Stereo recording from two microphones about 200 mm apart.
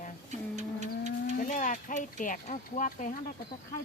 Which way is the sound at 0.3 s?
35° right (ahead or behind).